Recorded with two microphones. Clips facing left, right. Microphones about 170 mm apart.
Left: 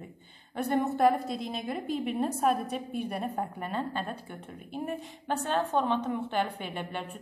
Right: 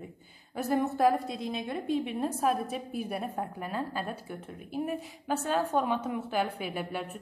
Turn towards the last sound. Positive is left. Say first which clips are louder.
# right 2 dB
turn(degrees=-5)  # may be behind; listen again after turning